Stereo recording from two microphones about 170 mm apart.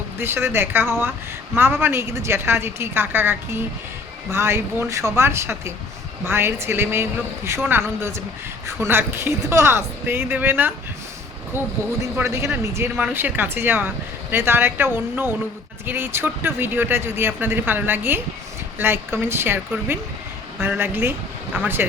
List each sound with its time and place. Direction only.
0.2 s speech: 15° right (ahead or behind)